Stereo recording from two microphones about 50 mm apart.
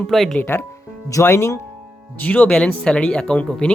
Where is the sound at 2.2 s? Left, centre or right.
Left.